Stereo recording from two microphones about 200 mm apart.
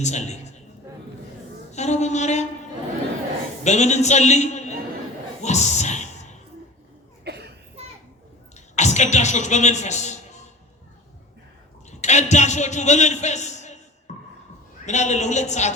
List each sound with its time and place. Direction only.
0.0 s a man's voice: 35° left (ahead or behind)
1.7 s a man's voice: 35° left (ahead or behind)
3.6 s a man's voice: 35° left (ahead or behind)
7.3 s a sound: 55° right (ahead or behind)
8.5 s a sound: 35° left (ahead or behind)
11.9 s a man's voice: 35° left (ahead or behind)
14.1 s beatboxing: 35° left (ahead or behind)
14.8 s a man's voice: 35° left (ahead or behind)